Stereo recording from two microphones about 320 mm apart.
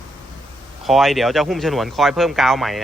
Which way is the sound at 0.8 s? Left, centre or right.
Centre.